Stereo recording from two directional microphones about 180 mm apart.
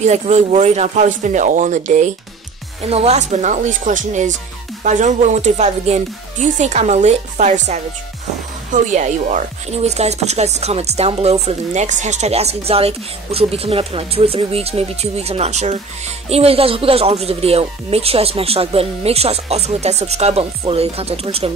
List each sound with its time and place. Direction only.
0.0 s speech: 40° right (ahead or behind)